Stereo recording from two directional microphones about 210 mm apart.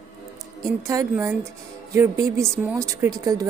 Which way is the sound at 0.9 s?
15° right (ahead or behind).